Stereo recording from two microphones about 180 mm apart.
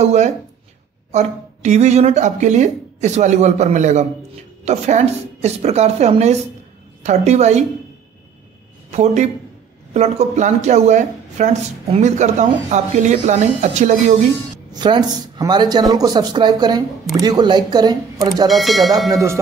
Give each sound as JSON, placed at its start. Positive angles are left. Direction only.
{"t": 0.0, "sound": "speech", "side_deg": -40}
{"t": 8.9, "sound": "speech", "side_deg": -40}
{"t": 14.7, "sound": "speech", "side_deg": -25}
{"t": 18.5, "sound": "speech", "side_deg": 0}